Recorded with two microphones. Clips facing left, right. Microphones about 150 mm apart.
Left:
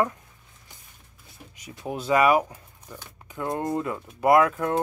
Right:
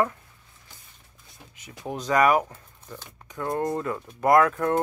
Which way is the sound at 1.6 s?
10° left (ahead or behind).